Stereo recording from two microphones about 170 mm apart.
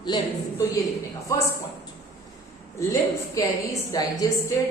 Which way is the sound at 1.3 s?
15° left (ahead or behind).